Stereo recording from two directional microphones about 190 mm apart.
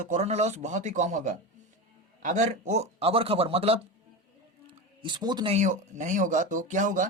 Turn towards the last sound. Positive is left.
turn(degrees=-40)  # may be behind; listen again after turning